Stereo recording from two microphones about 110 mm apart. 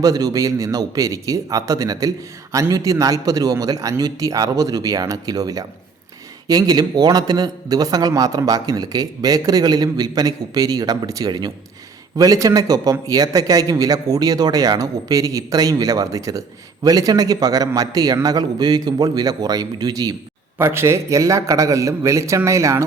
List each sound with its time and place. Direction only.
0.0 s a man's voice: 35° right (ahead or behind)
20.6 s a man's voice: 20° right (ahead or behind)